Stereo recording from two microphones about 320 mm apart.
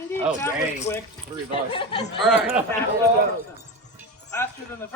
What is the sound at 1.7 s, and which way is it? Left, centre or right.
Speech, centre.